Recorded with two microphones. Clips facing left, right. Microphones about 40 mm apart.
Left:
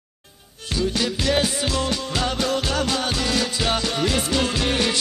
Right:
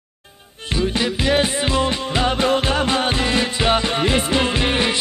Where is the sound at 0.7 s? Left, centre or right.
Right.